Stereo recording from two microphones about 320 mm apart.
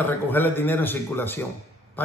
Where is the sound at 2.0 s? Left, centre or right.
Centre.